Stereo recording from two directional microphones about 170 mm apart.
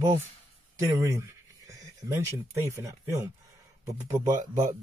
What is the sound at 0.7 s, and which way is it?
Speech, 20° right (ahead or behind).